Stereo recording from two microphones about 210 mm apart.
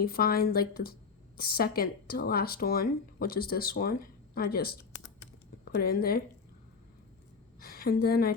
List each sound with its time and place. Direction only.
0.0 s speech: 45° left (ahead or behind)
7.6 s a woman's voice: 45° left (ahead or behind)